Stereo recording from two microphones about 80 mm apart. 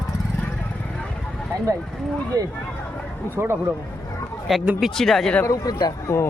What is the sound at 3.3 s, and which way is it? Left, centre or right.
Speech, right.